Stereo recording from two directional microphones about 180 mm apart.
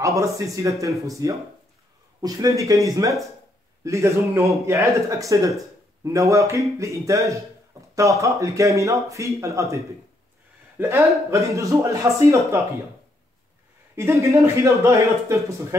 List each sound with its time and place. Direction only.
0.0 s speech: 15° right (ahead or behind)
13.9 s speech: 15° right (ahead or behind)